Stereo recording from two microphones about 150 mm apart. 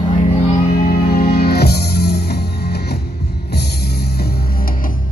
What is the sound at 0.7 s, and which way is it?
Music, 80° left.